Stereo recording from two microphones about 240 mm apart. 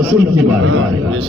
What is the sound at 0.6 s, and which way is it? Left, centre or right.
Speech, right.